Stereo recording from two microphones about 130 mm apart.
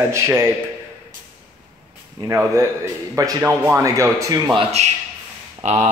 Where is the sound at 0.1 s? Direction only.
20° right (ahead or behind).